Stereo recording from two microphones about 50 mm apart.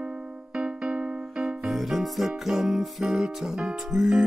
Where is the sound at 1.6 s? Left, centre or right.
Centre.